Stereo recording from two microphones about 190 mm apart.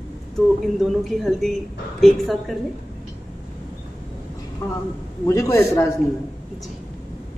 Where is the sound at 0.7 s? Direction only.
Centre (ahead or behind).